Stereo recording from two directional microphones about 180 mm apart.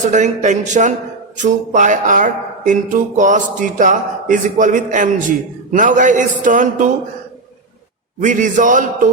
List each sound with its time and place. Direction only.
0.0 s speech: 40° right (ahead or behind)
8.2 s speech: 45° right (ahead or behind)